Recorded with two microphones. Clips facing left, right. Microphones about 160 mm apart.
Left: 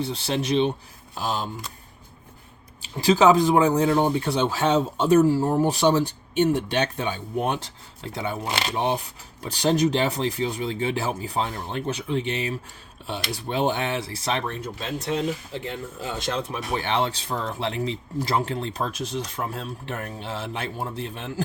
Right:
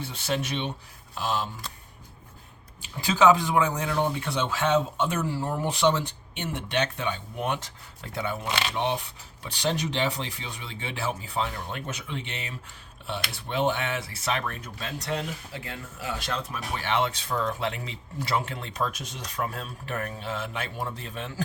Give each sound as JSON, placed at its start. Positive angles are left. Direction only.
{"t": 0.0, "sound": "speech", "side_deg": 30}
{"t": 3.0, "sound": "speech", "side_deg": 35}